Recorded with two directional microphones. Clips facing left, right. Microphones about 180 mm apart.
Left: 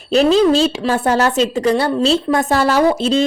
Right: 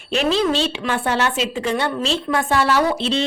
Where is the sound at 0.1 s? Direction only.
40° left (ahead or behind).